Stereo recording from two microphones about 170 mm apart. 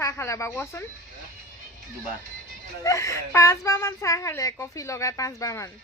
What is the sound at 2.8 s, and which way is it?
Speech, 20° left (ahead or behind).